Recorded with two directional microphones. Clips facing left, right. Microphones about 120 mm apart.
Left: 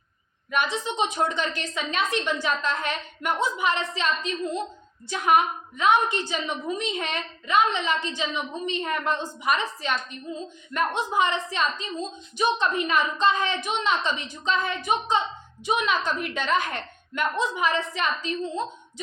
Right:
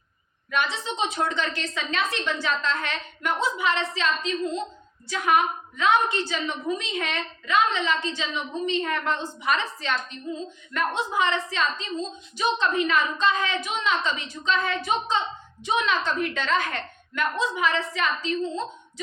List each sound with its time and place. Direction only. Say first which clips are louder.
0.5 s a woman's voice: left 1 dB; 15° left (ahead or behind)